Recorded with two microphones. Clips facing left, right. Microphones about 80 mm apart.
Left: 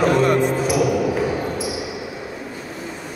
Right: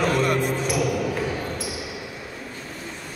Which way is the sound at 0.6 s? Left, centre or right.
Centre.